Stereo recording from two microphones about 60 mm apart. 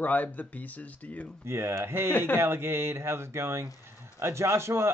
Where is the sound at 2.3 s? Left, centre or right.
Right.